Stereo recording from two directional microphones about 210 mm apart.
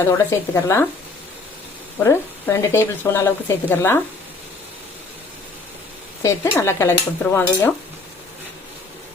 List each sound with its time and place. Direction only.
0.1 s speech: 15° left (ahead or behind)
2.0 s speech: 15° left (ahead or behind)
6.2 s speech: 15° left (ahead or behind)